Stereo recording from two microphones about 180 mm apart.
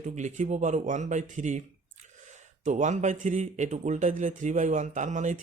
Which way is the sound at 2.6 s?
40° right (ahead or behind).